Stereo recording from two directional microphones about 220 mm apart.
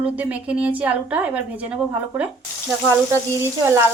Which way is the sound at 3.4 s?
15° right (ahead or behind).